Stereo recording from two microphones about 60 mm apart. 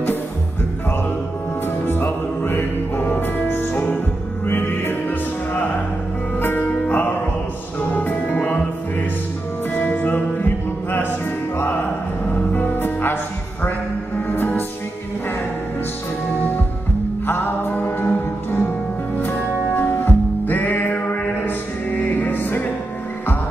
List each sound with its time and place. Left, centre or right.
1.9 s music: left
6.9 s music: left
9.8 s music: left
14.3 s music: left
17.3 s music: left